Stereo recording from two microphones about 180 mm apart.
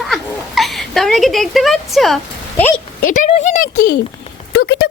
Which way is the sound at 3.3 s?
40° left (ahead or behind).